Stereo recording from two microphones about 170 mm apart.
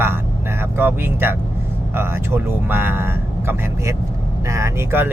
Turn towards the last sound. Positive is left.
turn(degrees=-10)  # may be behind; listen again after turning